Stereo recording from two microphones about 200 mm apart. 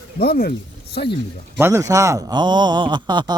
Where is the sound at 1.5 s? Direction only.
10° right (ahead or behind).